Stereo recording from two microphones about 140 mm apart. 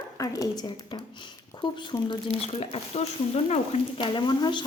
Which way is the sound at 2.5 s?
45° left (ahead or behind).